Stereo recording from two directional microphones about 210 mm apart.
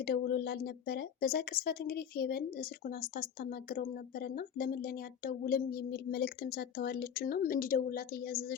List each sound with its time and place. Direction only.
0.0 s a woman's voice: 50° left (ahead or behind)